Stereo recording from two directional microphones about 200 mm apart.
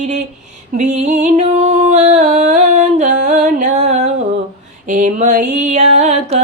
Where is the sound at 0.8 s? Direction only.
35° right (ahead or behind).